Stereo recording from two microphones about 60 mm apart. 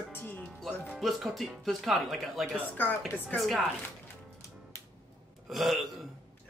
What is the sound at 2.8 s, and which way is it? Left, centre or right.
Speech, left.